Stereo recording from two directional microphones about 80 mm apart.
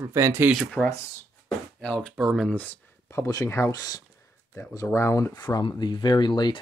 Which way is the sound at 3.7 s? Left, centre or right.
Left.